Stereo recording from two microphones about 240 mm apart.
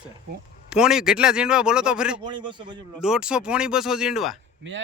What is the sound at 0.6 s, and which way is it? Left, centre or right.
A man's voice, centre.